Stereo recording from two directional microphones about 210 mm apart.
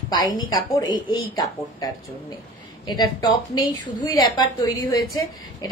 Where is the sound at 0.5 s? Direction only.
20° left (ahead or behind).